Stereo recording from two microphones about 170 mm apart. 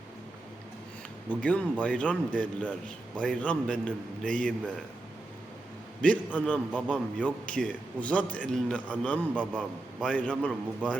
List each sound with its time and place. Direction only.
1.4 s a man's voice: 5° left (ahead or behind)
6.0 s a man's voice: 5° left (ahead or behind)
6.7 s a man's voice: 10° right (ahead or behind)
7.2 s a man's voice: 5° left (ahead or behind)
9.3 s a man's voice: 10° right (ahead or behind)
9.6 s a man's voice: 5° left (ahead or behind)